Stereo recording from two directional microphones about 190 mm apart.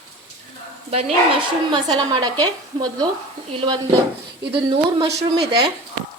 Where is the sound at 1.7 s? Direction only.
20° right (ahead or behind).